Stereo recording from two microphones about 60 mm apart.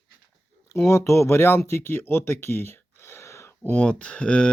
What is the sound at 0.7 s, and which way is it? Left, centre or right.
Speech, left.